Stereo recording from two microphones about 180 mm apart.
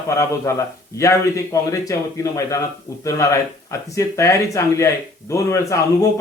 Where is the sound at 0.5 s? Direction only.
15° left (ahead or behind).